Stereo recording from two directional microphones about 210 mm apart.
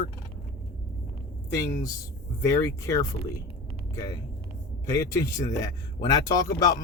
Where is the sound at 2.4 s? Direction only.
15° left (ahead or behind).